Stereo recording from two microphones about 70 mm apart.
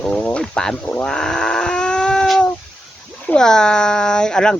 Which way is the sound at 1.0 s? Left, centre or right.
Centre.